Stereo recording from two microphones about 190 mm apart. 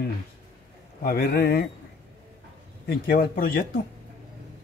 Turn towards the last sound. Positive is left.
turn(degrees=50)  # may be behind; listen again after turning